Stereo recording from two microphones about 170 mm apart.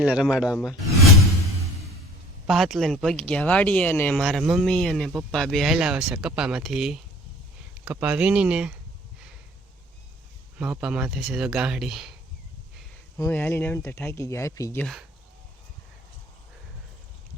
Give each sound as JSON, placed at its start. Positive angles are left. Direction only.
{"t": 0.0, "sound": "speech", "side_deg": -5}
{"t": 2.5, "sound": "speech", "side_deg": 0}
{"t": 10.6, "sound": "speech", "side_deg": -5}
{"t": 13.1, "sound": "speech", "side_deg": 15}